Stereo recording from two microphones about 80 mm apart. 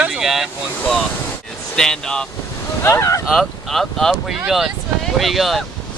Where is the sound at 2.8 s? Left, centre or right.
Left.